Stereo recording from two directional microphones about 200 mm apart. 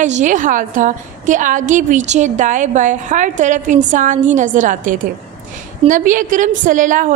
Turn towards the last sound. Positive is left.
turn(degrees=-40)  # may be behind; listen again after turning